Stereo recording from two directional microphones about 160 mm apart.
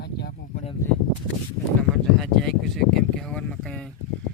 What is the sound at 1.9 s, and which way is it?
Speech, centre (ahead or behind).